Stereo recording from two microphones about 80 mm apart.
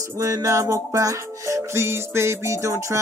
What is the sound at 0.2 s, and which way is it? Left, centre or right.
Music, right.